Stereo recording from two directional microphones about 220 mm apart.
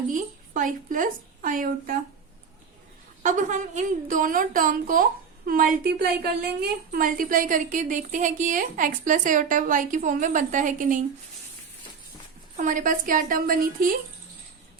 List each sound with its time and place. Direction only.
0.1 s a woman's voice: 35° right (ahead or behind)
3.2 s a woman's voice: 35° right (ahead or behind)
12.5 s a woman's voice: 35° right (ahead or behind)